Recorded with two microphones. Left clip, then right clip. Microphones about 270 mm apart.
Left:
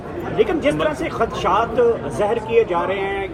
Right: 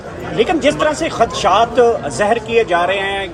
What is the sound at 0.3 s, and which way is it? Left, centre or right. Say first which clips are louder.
A man's voice: right 4 dB; right.